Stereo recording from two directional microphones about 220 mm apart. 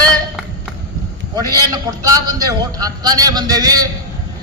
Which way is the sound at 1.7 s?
15° right (ahead or behind).